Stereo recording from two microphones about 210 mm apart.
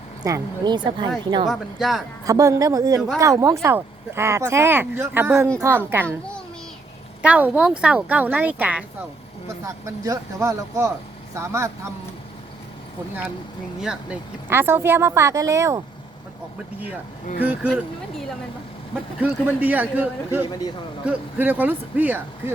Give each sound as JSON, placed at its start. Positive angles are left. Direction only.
{"t": 0.3, "sound": "a woman's voice", "side_deg": -20}
{"t": 1.5, "sound": "speech", "side_deg": 0}
{"t": 2.2, "sound": "speech", "side_deg": -15}
{"t": 7.2, "sound": "speech", "side_deg": -5}
{"t": 13.8, "sound": "speech", "side_deg": -10}
{"t": 17.4, "sound": "speech", "side_deg": -10}
{"t": 19.2, "sound": "speech", "side_deg": -10}